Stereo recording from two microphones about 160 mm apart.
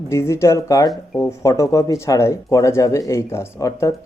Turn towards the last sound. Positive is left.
turn(degrees=20)  # may be behind; listen again after turning